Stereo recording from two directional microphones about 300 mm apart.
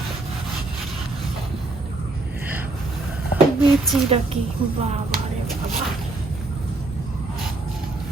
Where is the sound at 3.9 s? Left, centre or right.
Centre.